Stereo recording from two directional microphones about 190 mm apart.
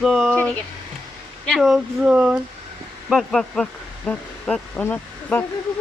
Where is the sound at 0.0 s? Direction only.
Centre (ahead or behind).